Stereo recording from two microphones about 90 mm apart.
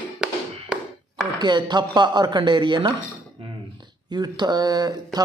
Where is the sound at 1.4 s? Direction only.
55° right (ahead or behind).